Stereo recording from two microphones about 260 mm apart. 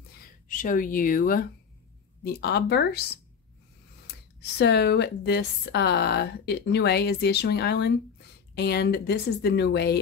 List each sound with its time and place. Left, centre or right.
0.5 s speech: left
4.1 s speech: left